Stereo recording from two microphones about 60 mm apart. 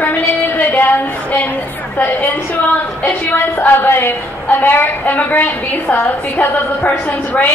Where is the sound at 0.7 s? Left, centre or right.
Left.